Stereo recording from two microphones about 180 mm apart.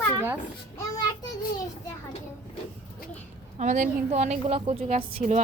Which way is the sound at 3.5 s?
45° right (ahead or behind).